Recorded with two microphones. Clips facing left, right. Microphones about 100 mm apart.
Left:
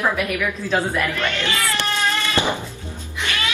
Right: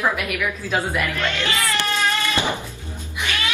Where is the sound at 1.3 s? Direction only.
20° right (ahead or behind).